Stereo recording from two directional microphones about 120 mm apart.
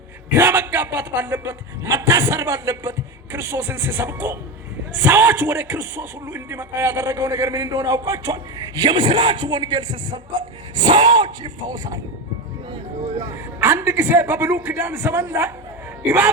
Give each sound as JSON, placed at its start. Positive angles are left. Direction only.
{"t": 0.3, "sound": "a man's voice", "side_deg": -20}
{"t": 8.8, "sound": "music", "side_deg": -40}
{"t": 13.2, "sound": "speech", "side_deg": -20}